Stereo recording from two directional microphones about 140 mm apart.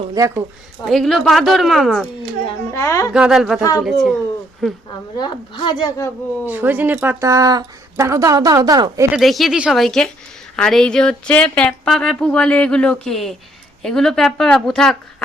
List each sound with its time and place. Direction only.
0.1 s a woman's voice: 20° right (ahead or behind)
0.9 s speech: centre (ahead or behind)
2.7 s a woman's voice: 20° left (ahead or behind)
3.1 s speech: 5° right (ahead or behind)
3.6 s a woman's voice: 25° left (ahead or behind)
3.8 s speech: centre (ahead or behind)
5.1 s a woman's voice: 30° left (ahead or behind)
6.4 s speech: 10° right (ahead or behind)
7.3 s a woman's voice: 25° right (ahead or behind)
9.1 s speech: centre (ahead or behind)